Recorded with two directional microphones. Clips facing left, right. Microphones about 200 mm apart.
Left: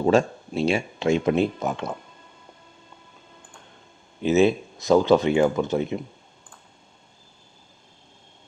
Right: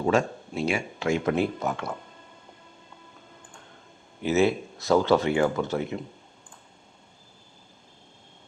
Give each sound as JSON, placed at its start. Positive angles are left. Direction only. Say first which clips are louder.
{"t": 0.0, "sound": "speech", "louder": "left 4 dB", "side_deg": 30}
{"t": 4.2, "sound": "speech", "louder": "left 4 dB", "side_deg": 20}